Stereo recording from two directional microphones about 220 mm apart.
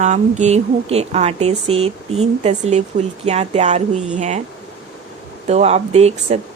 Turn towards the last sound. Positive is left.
turn(degrees=-30)  # may be behind; listen again after turning